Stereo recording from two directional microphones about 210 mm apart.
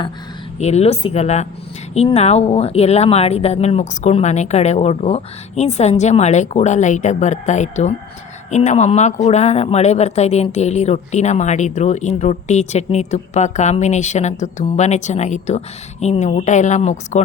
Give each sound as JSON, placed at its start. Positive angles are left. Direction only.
{"t": 0.6, "sound": "speech", "side_deg": 30}